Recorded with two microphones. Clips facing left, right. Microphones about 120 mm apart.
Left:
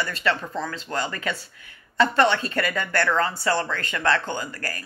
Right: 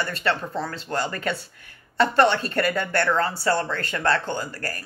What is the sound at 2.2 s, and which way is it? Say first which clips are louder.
Speech: right 1 dB; 35° right (ahead or behind).